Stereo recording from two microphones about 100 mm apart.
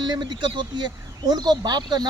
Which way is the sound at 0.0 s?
45° right (ahead or behind).